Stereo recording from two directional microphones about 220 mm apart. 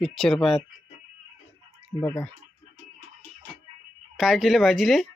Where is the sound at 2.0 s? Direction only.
10° left (ahead or behind).